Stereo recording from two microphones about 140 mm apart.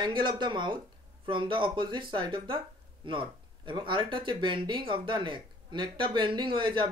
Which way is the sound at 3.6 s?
35° right (ahead or behind).